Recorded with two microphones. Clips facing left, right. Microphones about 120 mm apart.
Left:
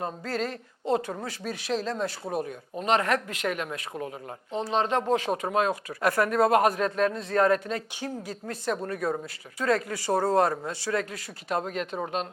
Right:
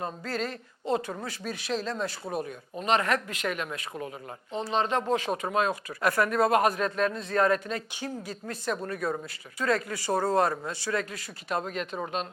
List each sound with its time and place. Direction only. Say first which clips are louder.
0.0 s speech: left 2 dB; 55° left (ahead or behind)
8.8 s speech: left 2 dB; 40° left (ahead or behind)
9.6 s speech: left 2 dB; 55° left (ahead or behind)